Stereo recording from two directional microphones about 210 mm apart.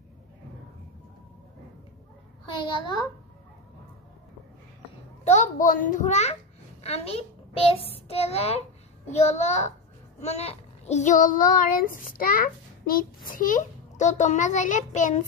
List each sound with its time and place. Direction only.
2.4 s a child's voice: 25° left (ahead or behind)
5.2 s a child's voice: 35° left (ahead or behind)